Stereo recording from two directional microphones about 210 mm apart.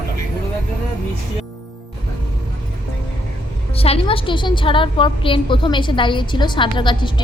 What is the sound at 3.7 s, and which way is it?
A woman's voice, 25° left (ahead or behind).